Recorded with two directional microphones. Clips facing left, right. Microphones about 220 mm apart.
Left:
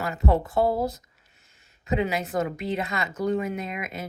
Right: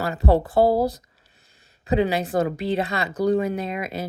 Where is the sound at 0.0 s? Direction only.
35° right (ahead or behind).